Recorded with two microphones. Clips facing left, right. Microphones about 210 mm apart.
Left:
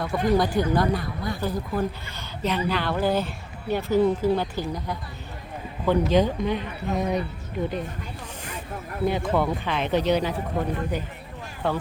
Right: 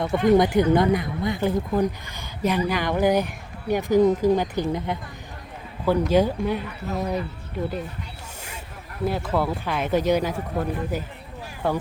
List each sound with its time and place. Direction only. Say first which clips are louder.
0.0 s speech: right 4 dB; 20° right (ahead or behind)
5.8 s speech: right 1 dB; 10° right (ahead or behind)
9.0 s speech: left 1 dB; 5° right (ahead or behind)